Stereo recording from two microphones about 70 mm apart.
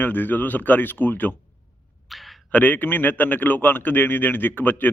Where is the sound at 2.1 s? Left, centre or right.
Centre.